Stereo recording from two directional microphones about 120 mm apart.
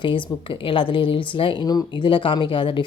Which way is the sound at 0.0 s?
45° left (ahead or behind).